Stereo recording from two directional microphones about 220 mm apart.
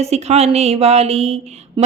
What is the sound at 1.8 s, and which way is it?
Speech, 20° right (ahead or behind).